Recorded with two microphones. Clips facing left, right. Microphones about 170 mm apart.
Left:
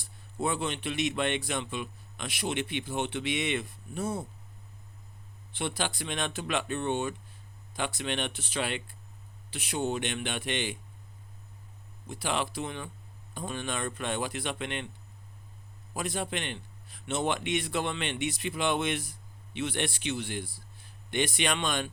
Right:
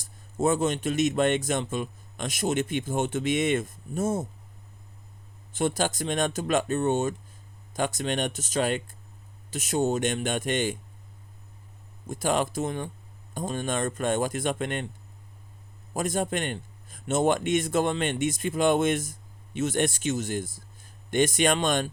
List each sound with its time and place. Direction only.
0.0 s speech: 45° right (ahead or behind)
5.5 s speech: 45° right (ahead or behind)
12.0 s speech: 45° right (ahead or behind)
16.0 s speech: 45° right (ahead or behind)